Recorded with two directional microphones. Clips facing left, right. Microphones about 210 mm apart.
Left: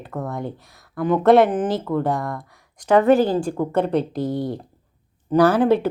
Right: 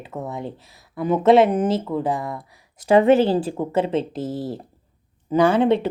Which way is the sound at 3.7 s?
Centre (ahead or behind).